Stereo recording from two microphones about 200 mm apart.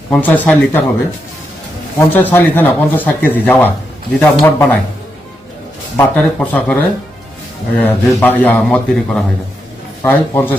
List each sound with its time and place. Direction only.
0.1 s speech: 10° left (ahead or behind)
2.0 s speech: 10° left (ahead or behind)
6.0 s speech: 10° left (ahead or behind)